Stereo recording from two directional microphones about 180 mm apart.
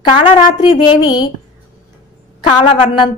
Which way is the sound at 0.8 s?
25° left (ahead or behind).